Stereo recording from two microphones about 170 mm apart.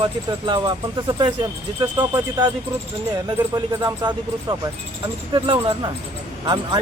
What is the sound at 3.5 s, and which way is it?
Speech, 20° right (ahead or behind).